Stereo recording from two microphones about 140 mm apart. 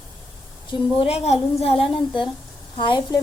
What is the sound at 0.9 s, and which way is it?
A woman's voice, 45° left (ahead or behind).